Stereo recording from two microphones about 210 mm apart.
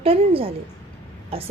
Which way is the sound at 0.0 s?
25° right (ahead or behind).